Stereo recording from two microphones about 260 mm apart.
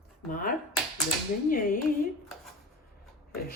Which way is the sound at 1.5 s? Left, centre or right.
Left.